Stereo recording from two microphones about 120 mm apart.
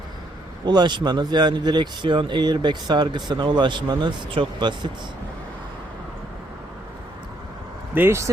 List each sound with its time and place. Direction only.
0.6 s speech: 40° right (ahead or behind)
7.9 s speech: 20° right (ahead or behind)